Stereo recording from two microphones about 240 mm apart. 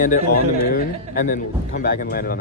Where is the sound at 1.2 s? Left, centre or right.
Left.